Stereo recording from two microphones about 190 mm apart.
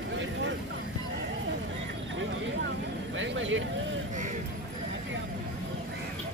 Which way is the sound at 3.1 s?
85° right.